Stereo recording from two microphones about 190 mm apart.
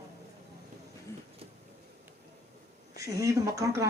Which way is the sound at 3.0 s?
15° right (ahead or behind).